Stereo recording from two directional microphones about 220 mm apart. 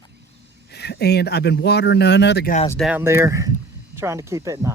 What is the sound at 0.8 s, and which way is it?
Speech, 50° left (ahead or behind).